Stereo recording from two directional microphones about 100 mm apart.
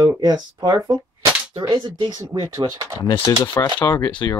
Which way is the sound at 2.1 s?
45° right (ahead or behind).